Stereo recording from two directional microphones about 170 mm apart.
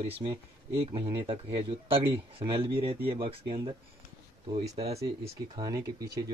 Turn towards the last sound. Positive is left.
turn(degrees=-20)  # may be behind; listen again after turning